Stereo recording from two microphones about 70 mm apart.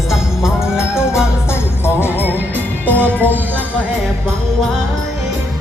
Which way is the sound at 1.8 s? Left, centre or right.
Left.